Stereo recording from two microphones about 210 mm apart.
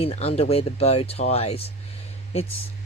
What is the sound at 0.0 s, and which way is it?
Speech, 30° left (ahead or behind).